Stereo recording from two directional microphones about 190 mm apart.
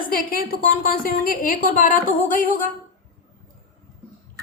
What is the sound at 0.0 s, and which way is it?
A woman's voice, 50° left (ahead or behind).